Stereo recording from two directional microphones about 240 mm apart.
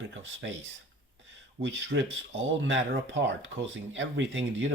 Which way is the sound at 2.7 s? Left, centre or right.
Right.